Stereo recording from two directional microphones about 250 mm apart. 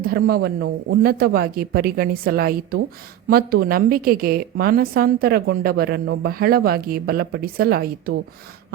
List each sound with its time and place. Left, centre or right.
0.0 s a woman's voice: right